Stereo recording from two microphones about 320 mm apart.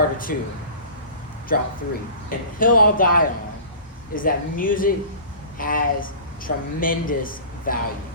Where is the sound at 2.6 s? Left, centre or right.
Left.